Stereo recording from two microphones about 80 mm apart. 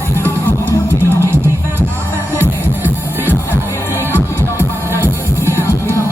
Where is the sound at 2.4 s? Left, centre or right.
Right.